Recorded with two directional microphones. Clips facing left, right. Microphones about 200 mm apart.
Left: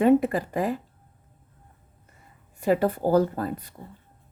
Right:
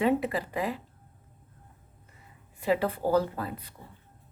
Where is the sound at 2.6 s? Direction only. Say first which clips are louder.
Left 4 dB; 45° left (ahead or behind).